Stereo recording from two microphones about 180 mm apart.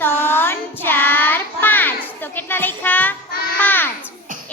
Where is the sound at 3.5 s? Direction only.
10° left (ahead or behind).